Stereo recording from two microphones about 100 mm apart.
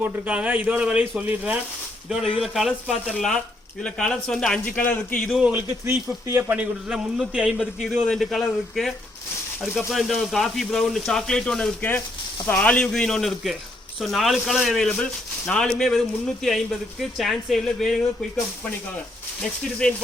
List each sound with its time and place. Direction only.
0.0 s speech: 10° right (ahead or behind)
2.4 s a man's voice: 5° right (ahead or behind); by 5.3 s 15° left (ahead or behind)
5.5 s a man's voice: 20° right (ahead or behind)
6.6 s a man's voice: 10° right (ahead or behind)
19.8 s a man's voice: 10° left (ahead or behind)